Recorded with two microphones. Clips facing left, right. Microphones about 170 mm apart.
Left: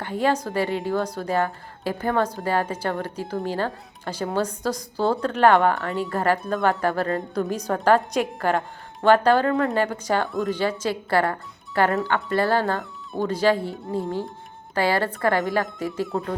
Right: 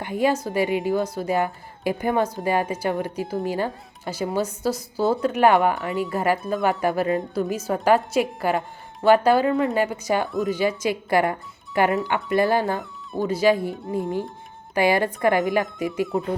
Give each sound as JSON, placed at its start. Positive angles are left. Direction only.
{"t": 0.0, "sound": "a woman's voice", "side_deg": -10}
{"t": 14.8, "sound": "speech", "side_deg": -15}